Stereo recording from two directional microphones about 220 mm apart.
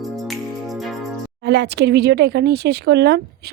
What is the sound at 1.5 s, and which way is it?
Speech, 50° right (ahead or behind).